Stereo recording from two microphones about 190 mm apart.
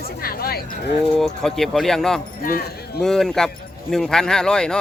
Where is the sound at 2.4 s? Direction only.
50° left (ahead or behind).